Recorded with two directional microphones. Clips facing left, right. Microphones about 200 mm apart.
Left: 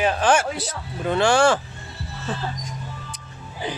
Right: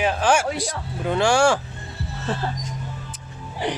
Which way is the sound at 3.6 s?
75° right (ahead or behind).